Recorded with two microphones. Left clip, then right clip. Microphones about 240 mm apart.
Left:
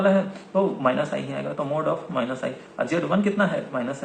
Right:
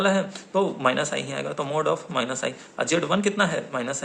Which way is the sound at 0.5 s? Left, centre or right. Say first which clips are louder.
Left 1 dB; right.